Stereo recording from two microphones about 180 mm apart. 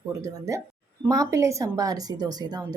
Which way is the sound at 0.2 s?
15° right (ahead or behind).